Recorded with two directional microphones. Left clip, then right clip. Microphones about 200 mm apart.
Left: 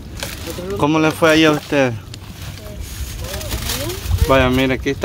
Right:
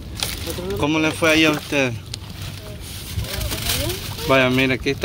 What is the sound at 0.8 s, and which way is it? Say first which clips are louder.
Speech: left 5 dB; 30° left (ahead or behind).